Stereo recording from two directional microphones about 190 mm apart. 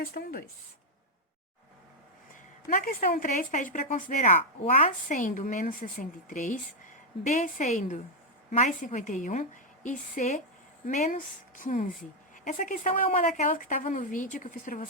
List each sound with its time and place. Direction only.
0.0 s speech: 55° left (ahead or behind)
2.3 s a woman's voice: 45° left (ahead or behind)